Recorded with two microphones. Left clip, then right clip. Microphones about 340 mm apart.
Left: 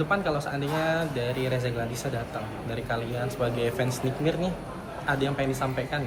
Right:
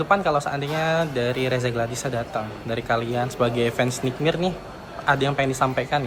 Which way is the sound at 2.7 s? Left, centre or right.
Centre.